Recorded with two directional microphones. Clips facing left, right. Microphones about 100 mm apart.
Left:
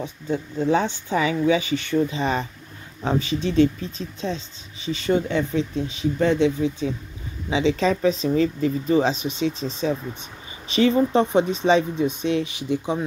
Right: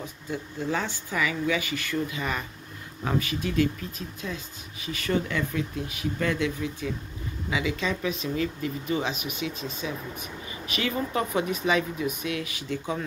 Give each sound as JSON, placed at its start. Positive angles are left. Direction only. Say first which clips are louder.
{"t": 0.7, "sound": "speech", "louder": "left 9 dB", "side_deg": 20}
{"t": 4.8, "sound": "speech", "louder": "left 6 dB", "side_deg": 25}